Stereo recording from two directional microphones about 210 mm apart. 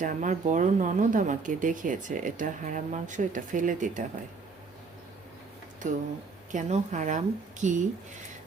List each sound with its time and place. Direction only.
0.0 s speech: 35° right (ahead or behind)
5.8 s speech: 35° right (ahead or behind)